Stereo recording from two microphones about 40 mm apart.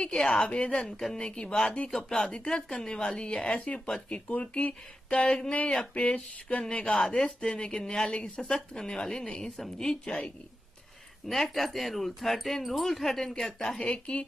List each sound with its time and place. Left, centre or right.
0.0 s speech: centre
0.8 s speech: centre
1.1 s speech: left
1.9 s a woman's voice: centre
2.2 s a woman's voice: left
11.2 s speech: centre
13.6 s speech: centre